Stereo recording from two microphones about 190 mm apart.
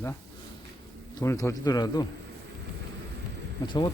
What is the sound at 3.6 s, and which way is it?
Speech, 25° left (ahead or behind).